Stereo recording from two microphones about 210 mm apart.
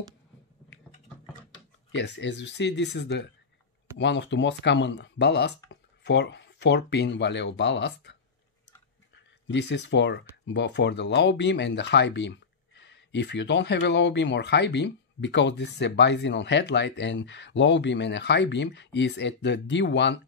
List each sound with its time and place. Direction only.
1.9 s speech: 55° left (ahead or behind)
9.5 s speech: 55° left (ahead or behind)